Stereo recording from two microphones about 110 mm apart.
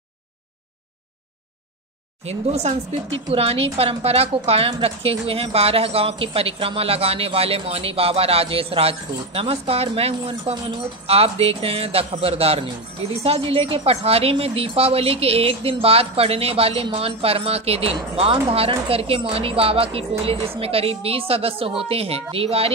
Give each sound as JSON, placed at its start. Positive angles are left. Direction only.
{"t": 2.2, "sound": "speech", "side_deg": -75}
{"t": 3.3, "sound": "a woman's voice", "side_deg": -60}